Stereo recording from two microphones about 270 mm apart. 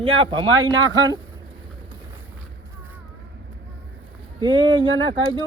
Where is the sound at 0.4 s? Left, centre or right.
Right.